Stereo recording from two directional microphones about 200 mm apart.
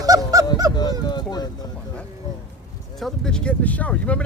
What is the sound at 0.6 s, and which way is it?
Speech, 15° right (ahead or behind).